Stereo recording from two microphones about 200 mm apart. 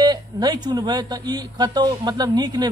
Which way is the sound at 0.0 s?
20° right (ahead or behind).